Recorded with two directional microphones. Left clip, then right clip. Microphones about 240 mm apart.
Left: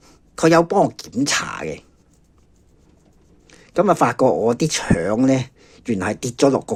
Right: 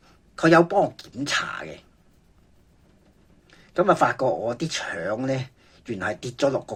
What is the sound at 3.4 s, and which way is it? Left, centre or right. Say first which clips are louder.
Speech: left 3 dB; left.